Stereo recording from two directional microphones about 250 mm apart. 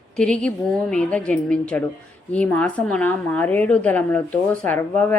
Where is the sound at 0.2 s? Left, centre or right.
Centre.